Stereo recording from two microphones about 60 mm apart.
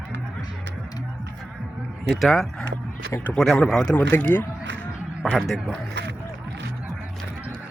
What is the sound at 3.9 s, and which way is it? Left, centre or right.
Speech, left.